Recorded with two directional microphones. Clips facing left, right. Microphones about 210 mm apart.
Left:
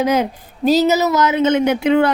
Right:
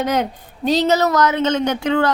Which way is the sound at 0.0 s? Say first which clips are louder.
Left 3 dB; centre (ahead or behind).